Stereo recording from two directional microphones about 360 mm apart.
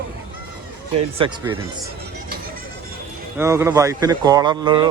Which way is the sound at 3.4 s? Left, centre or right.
Centre.